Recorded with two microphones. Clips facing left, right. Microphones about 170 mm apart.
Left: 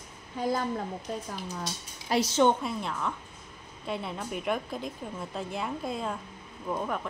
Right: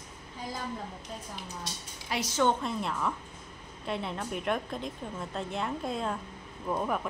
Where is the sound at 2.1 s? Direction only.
25° left (ahead or behind).